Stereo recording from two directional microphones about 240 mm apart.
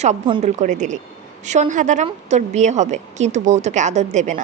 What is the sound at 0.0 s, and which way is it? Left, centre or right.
A woman's voice, right.